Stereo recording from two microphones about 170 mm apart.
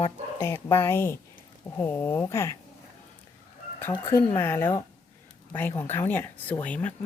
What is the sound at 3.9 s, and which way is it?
Speech, 20° left (ahead or behind).